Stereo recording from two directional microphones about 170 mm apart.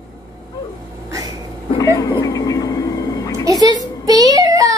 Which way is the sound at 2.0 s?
20° left (ahead or behind).